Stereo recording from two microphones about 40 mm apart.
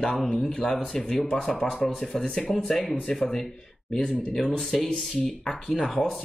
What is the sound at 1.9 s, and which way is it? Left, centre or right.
Speech, left.